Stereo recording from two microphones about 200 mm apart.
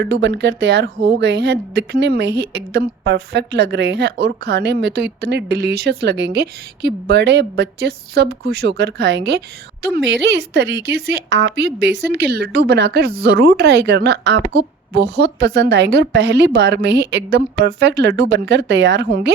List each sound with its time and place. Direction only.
0.0 s speech: 55° right (ahead or behind)